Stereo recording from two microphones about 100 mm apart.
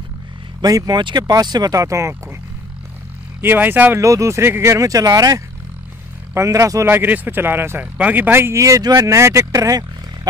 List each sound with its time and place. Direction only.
0.6 s speech: 40° right (ahead or behind)
3.3 s speech: 20° right (ahead or behind)
4.0 s speech: 30° right (ahead or behind)